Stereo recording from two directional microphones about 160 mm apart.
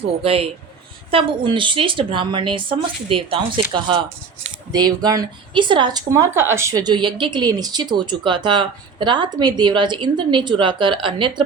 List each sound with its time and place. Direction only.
0.2 s a woman's voice: 35° right (ahead or behind)